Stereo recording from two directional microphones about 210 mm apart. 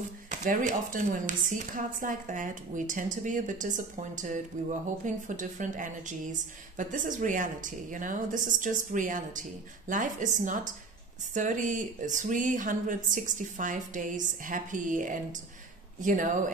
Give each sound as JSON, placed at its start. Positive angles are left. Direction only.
{"t": 0.3, "sound": "a woman's voice", "side_deg": -40}